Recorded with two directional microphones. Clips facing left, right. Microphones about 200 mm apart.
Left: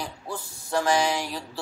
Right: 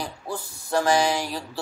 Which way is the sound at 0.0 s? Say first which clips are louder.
Right 2 dB; 35° right (ahead or behind).